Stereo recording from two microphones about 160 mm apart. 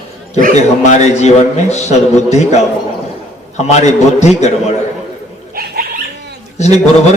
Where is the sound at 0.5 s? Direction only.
45° left (ahead or behind).